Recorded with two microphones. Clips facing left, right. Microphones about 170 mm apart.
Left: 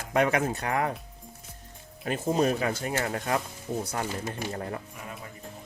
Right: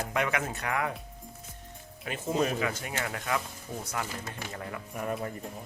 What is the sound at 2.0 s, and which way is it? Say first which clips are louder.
Speech: left 4 dB; 35° left (ahead or behind).